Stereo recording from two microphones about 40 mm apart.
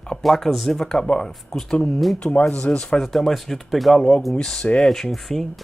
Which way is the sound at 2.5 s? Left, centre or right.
Left.